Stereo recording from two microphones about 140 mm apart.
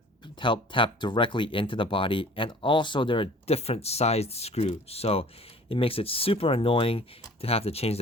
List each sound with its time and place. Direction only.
0.3 s speech: 35° left (ahead or behind)